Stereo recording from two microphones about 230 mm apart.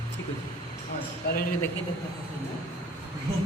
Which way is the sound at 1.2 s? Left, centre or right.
Left.